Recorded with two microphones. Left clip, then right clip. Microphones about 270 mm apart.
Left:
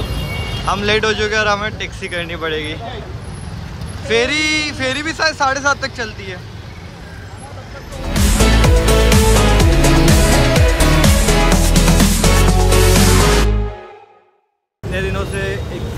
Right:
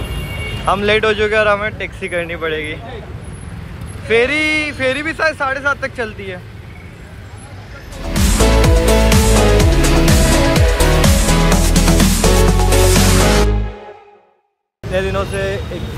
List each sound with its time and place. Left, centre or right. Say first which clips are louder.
0.7 s speech: right 2 dB; centre
4.1 s speech: right 2 dB; centre
8.0 s music: right 1 dB; centre
14.9 s speech: right 4 dB; centre